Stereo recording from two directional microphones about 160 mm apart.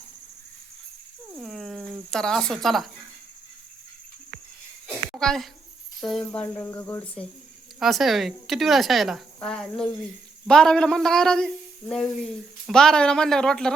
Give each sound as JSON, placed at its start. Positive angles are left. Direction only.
{"t": 1.4, "sound": "speech", "side_deg": 0}
{"t": 5.1, "sound": "speech", "side_deg": 5}
{"t": 7.8, "sound": "a man's voice", "side_deg": 0}